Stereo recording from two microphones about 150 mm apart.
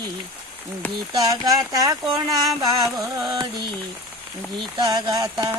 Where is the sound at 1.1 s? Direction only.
25° right (ahead or behind).